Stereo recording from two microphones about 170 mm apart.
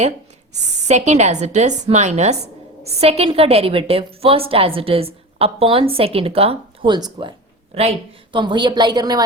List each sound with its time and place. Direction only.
0.9 s a woman's voice: 40° right (ahead or behind); by 9.2 s 25° right (ahead or behind)